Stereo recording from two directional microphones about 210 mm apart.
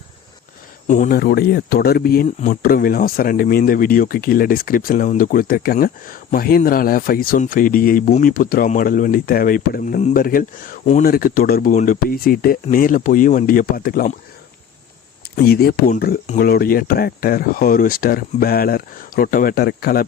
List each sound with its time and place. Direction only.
0.9 s speech: 40° left (ahead or behind)
15.4 s speech: 45° left (ahead or behind)